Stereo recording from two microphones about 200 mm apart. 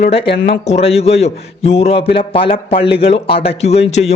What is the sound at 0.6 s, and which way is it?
A man's voice, 30° left (ahead or behind).